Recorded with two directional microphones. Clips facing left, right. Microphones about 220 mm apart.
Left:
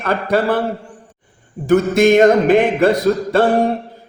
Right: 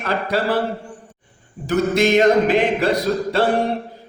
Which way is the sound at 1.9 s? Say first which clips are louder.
Left 3 dB; 50° left (ahead or behind).